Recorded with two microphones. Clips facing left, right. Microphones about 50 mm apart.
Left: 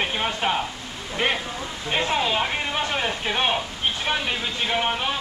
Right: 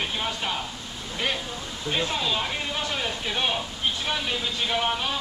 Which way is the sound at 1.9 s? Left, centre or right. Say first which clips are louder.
Left 4 dB; left.